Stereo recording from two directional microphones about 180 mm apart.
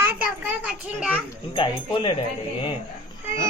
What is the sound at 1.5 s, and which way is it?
Speech, 30° left (ahead or behind).